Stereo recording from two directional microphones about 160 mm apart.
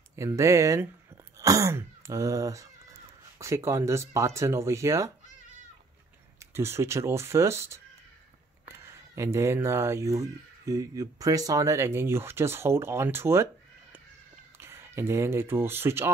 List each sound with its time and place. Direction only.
0.1 s speech: 20° right (ahead or behind)
6.4 s speech: 15° right (ahead or behind)
14.6 s speech: 15° right (ahead or behind)